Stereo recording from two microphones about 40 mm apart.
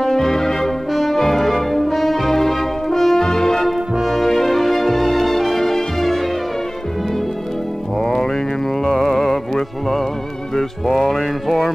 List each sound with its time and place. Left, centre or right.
0.0 s music: centre
8.0 s music: centre